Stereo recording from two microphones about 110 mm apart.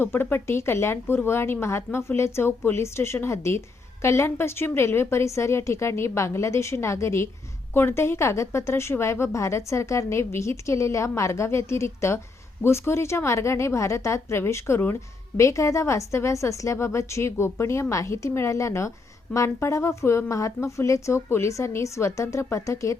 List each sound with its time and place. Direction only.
0.0 s a woman's voice: 20° left (ahead or behind)